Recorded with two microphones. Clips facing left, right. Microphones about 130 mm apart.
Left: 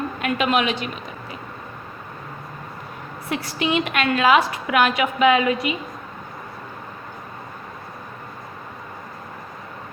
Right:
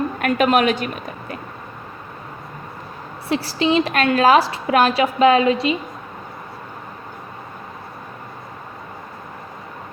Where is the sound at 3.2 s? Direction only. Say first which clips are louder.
Right 5 dB; 30° right (ahead or behind).